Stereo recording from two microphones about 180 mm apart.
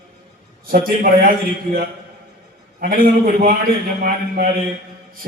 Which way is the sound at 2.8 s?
50° right (ahead or behind).